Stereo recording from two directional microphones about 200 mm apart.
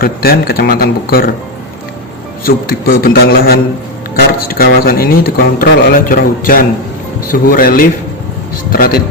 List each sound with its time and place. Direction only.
0.0 s speech: 50° left (ahead or behind)
2.4 s speech: 45° left (ahead or behind)